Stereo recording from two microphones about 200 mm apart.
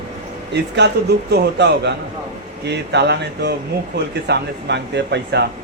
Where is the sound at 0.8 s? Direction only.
60° right (ahead or behind).